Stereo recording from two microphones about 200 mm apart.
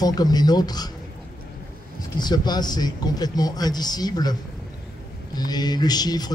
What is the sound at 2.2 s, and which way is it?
Speech, 20° left (ahead or behind).